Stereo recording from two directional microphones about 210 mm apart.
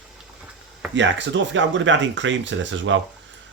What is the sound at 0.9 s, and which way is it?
Speech, 60° right (ahead or behind).